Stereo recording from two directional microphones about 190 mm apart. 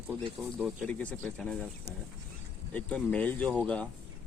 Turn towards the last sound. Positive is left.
turn(degrees=5)  # may be behind; listen again after turning